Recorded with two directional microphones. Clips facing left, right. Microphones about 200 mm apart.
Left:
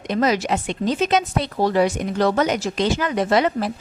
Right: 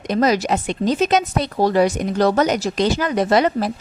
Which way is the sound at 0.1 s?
40° right (ahead or behind).